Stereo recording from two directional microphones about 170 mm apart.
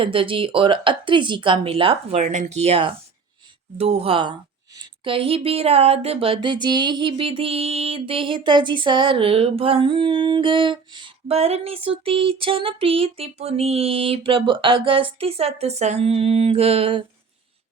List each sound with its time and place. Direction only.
0.0 s a woman's voice: 30° right (ahead or behind)